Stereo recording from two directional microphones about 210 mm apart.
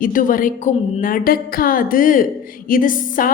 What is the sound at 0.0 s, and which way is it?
A woman's voice, 40° left (ahead or behind).